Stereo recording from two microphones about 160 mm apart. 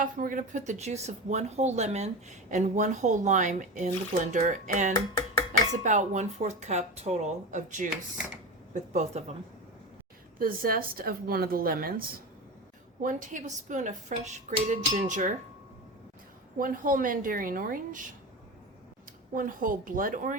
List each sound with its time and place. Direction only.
0.0 s speech: 55° right (ahead or behind)
10.3 s a woman's voice: 65° right (ahead or behind)
13.0 s speech: 55° right (ahead or behind)
16.6 s a woman's voice: 60° right (ahead or behind)
19.3 s a woman's voice: 60° right (ahead or behind)